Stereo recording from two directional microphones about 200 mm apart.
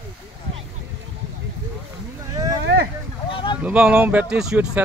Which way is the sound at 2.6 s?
50° right (ahead or behind).